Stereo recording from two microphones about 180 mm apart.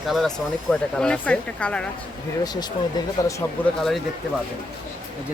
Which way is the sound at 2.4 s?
20° left (ahead or behind).